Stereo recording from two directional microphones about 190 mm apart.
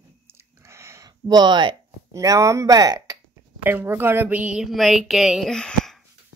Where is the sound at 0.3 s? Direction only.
15° right (ahead or behind).